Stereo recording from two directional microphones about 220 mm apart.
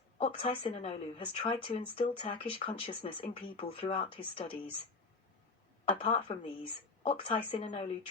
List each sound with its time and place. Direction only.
0.2 s speech: 30° left (ahead or behind)
6.0 s speech: 25° left (ahead or behind)